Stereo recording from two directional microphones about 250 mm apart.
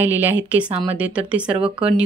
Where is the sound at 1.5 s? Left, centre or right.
Right.